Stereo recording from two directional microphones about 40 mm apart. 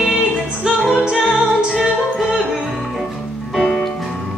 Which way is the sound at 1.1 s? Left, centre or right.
Centre.